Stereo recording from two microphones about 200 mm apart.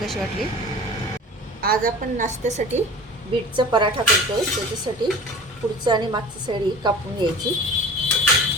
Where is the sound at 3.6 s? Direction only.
25° right (ahead or behind).